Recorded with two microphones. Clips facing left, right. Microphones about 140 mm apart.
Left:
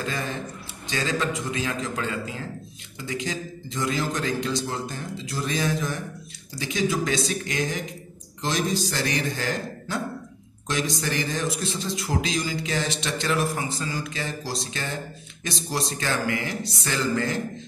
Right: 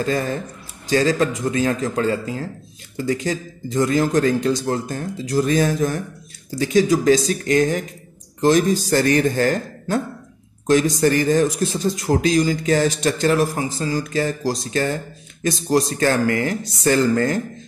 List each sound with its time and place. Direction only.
0.0 s a man's voice: 40° right (ahead or behind)